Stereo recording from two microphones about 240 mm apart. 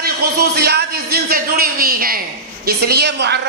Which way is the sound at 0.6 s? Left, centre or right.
Right.